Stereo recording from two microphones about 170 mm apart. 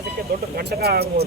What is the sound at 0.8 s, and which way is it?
Speech, 70° right (ahead or behind).